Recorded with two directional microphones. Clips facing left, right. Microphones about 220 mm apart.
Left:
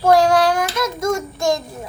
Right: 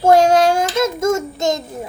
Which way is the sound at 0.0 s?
25° right (ahead or behind).